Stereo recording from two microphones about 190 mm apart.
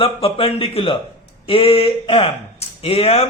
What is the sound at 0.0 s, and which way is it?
A man's voice, 30° left (ahead or behind).